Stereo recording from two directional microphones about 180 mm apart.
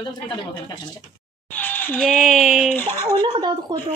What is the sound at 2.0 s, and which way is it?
Speech, centre (ahead or behind).